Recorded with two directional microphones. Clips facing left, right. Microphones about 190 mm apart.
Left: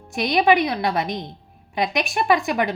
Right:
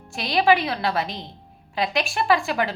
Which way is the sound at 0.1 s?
20° left (ahead or behind).